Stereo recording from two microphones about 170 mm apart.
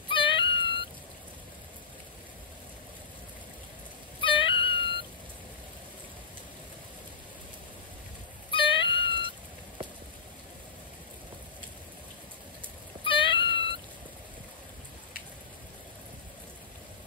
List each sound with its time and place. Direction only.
0.1 s a sound: 30° left (ahead or behind)
4.2 s wail: 30° left (ahead or behind)
8.5 s cat: 30° left (ahead or behind)
13.0 s cat: 30° left (ahead or behind)